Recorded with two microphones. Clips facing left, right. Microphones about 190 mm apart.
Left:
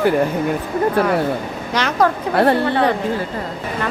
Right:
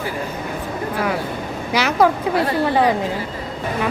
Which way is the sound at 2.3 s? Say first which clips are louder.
Left 5 dB; 60° left (ahead or behind).